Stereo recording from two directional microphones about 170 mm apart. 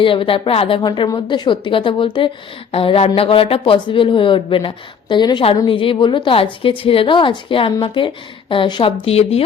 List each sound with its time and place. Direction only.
0.0 s a woman's voice: 30° left (ahead or behind)